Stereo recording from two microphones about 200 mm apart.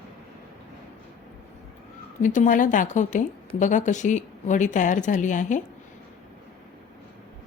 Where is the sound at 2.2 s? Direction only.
40° left (ahead or behind).